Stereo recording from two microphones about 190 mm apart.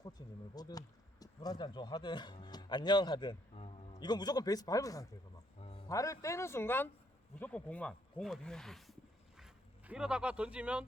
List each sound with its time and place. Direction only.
0.2 s speech: 20° left (ahead or behind)
3.9 s speech: 20° left (ahead or behind)
5.5 s music: 30° left (ahead or behind)
5.9 s speech: 15° left (ahead or behind); by 10.8 s 5° right (ahead or behind)